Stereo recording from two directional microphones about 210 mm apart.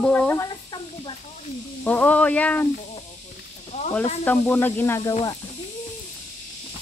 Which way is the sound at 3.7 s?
30° left (ahead or behind).